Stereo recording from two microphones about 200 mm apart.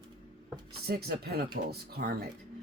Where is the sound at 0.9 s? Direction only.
50° right (ahead or behind).